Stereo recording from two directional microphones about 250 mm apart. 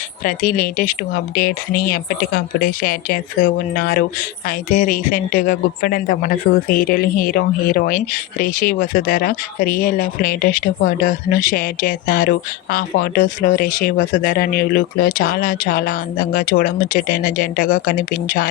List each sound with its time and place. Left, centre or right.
0.3 s a woman's voice: left